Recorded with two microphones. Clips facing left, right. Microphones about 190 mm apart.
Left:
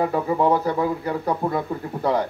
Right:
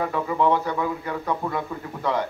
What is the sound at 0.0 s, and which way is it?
A man's voice, 35° left (ahead or behind).